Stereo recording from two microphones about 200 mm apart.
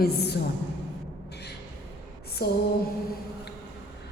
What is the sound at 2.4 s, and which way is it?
Speech, 50° left (ahead or behind).